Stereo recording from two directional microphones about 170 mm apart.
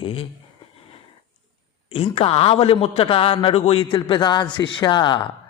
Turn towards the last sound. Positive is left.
turn(degrees=25)  # may be behind; listen again after turning